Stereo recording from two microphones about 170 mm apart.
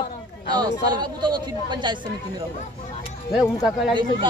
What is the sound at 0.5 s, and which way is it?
Speech, 25° right (ahead or behind).